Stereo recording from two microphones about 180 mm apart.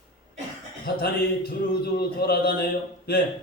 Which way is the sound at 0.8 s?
60° left (ahead or behind).